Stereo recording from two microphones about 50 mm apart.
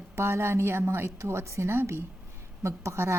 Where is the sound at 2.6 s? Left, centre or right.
Right.